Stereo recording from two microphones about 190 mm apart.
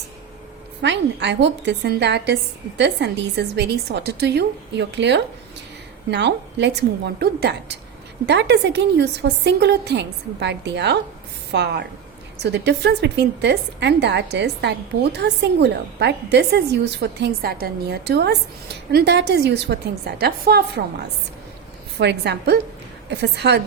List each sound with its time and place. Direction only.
0.8 s a woman's voice: 65° right (ahead or behind)
21.9 s a woman's voice: 65° right (ahead or behind)